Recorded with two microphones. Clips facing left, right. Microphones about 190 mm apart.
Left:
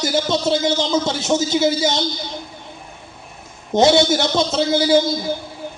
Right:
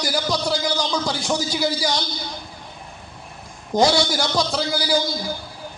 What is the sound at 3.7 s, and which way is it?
A man's voice, 25° left (ahead or behind).